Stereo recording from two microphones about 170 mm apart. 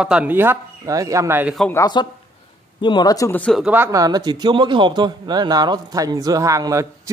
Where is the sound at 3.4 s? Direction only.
5° left (ahead or behind).